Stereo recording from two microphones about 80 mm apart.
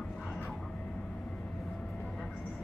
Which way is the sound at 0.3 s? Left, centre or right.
Centre.